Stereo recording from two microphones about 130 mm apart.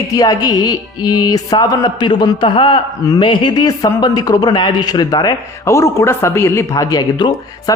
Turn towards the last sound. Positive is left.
turn(degrees=30)  # may be behind; listen again after turning